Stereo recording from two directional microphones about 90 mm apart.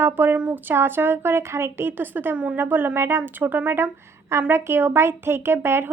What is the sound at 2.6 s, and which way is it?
A woman's voice, 25° right (ahead or behind).